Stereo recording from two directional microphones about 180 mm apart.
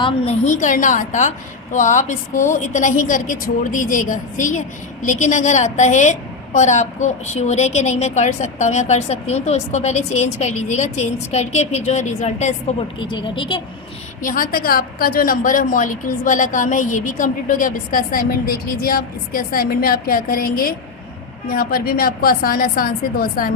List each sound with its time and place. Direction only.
0.0 s a woman's voice: 35° left (ahead or behind)
13.0 s speech: 25° left (ahead or behind)
14.2 s a woman's voice: 50° left (ahead or behind)